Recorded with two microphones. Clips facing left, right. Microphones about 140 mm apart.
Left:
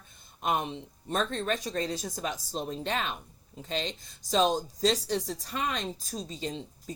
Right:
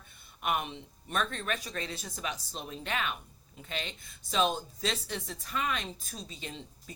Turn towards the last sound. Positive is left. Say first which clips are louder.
# left 7 dB
turn(degrees=35)  # may be behind; listen again after turning